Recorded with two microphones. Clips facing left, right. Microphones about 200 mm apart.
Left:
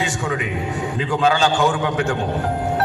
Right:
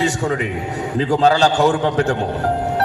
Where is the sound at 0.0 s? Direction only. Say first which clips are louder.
Right 4 dB; 40° right (ahead or behind).